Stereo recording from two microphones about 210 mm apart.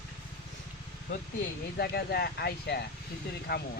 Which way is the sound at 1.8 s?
50° left (ahead or behind).